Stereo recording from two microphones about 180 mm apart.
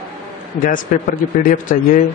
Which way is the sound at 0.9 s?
45° left (ahead or behind).